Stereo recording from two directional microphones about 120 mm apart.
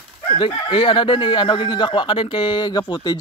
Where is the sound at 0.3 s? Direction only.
45° left (ahead or behind).